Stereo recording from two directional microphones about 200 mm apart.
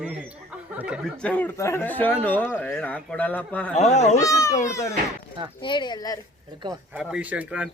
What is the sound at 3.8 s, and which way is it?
Speech, 35° left (ahead or behind).